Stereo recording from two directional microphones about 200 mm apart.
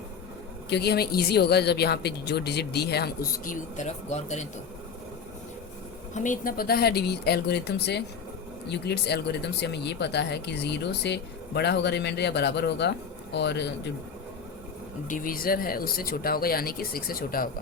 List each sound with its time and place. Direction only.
0.7 s a woman's voice: 55° left (ahead or behind); by 4.4 s 35° left (ahead or behind)
6.1 s a woman's voice: 40° left (ahead or behind); by 13.7 s 60° left (ahead or behind)
15.0 s a woman's voice: 40° left (ahead or behind)